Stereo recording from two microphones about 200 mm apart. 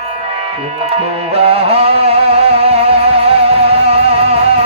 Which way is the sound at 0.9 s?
30° right (ahead or behind).